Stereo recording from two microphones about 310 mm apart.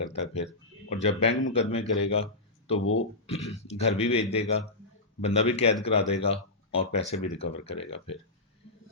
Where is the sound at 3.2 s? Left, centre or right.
Centre.